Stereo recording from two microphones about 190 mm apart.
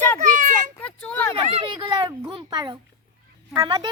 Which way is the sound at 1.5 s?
25° right (ahead or behind).